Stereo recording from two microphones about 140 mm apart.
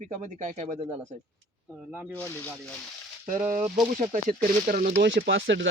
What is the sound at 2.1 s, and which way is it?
Speech, 15° left (ahead or behind).